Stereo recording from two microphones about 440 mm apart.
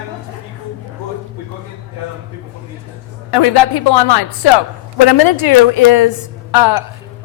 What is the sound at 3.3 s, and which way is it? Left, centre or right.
A woman's voice, left.